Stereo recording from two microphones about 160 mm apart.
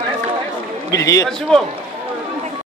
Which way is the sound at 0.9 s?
20° left (ahead or behind).